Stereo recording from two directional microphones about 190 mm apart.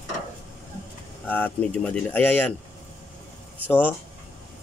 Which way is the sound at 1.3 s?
10° left (ahead or behind).